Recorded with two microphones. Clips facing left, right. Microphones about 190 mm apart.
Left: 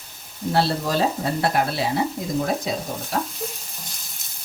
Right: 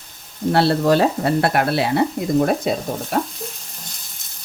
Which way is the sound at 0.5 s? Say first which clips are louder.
Right 6 dB; 65° right (ahead or behind).